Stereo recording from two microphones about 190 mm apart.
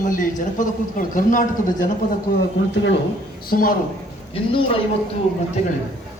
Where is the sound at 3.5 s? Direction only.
50° left (ahead or behind).